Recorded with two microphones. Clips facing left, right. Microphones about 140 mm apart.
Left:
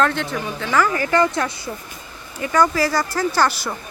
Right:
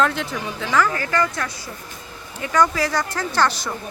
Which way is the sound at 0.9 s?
20° left (ahead or behind).